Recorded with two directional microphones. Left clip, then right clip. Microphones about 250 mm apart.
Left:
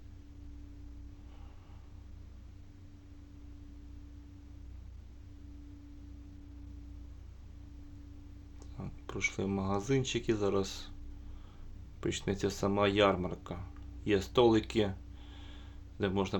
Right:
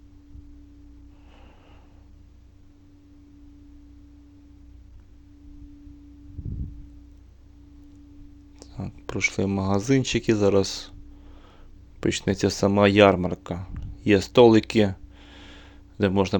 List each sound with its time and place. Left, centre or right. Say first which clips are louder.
8.5 s speech: right 10 dB; right
11.9 s speech: right 10 dB; right